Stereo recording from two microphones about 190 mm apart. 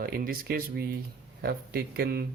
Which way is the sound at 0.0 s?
50° right (ahead or behind).